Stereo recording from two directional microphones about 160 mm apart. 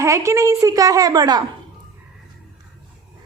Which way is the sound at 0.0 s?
20° right (ahead or behind).